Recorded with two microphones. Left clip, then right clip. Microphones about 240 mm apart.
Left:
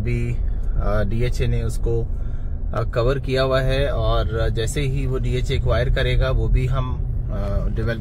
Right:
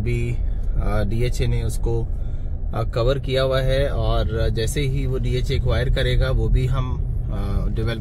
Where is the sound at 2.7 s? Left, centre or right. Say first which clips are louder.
Left 1 dB; centre.